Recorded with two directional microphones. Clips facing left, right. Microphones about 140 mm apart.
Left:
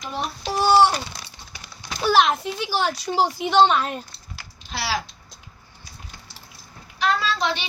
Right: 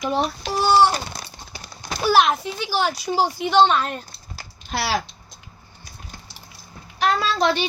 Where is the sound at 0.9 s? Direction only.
45° right (ahead or behind).